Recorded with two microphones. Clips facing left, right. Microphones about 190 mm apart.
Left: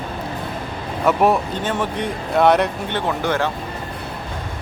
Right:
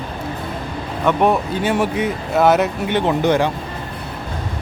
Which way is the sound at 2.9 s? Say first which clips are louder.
Right 8 dB; 20° right (ahead or behind).